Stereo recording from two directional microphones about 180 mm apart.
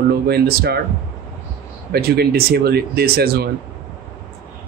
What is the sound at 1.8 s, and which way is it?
Speech, 60° right (ahead or behind).